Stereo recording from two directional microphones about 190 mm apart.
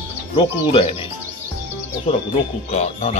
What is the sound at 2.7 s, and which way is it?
Speech, 35° left (ahead or behind).